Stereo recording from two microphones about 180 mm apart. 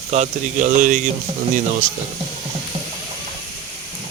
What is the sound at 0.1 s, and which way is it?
Speech, 40° right (ahead or behind).